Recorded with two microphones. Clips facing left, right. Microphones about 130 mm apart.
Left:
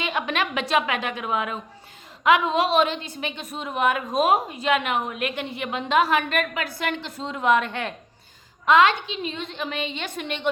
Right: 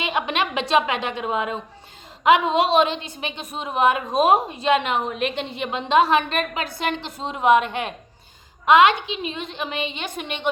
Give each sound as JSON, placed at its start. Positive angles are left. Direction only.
{"t": 0.0, "sound": "a woman's voice", "side_deg": -20}